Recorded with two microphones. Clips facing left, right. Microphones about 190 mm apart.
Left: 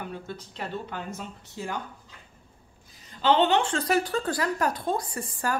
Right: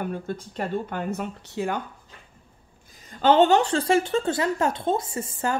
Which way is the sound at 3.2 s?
45° right (ahead or behind).